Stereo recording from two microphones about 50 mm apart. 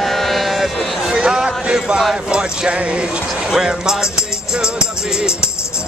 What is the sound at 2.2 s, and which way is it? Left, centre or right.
Speech, centre.